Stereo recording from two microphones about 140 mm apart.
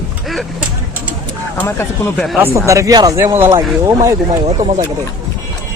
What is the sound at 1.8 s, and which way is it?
Speech, 15° left (ahead or behind).